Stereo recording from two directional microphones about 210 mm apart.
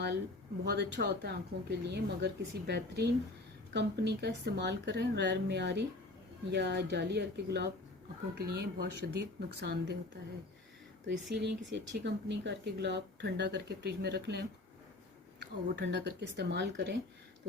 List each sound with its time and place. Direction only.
0.6 s speech: 50° right (ahead or behind)
11.0 s speech: 55° right (ahead or behind)